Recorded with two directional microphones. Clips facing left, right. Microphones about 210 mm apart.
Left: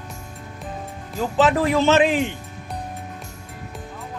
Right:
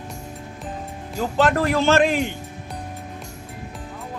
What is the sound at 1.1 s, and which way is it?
Speech, centre (ahead or behind).